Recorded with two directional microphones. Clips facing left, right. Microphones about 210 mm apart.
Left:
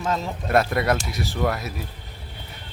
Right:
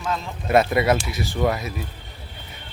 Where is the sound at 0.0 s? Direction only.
40° left (ahead or behind).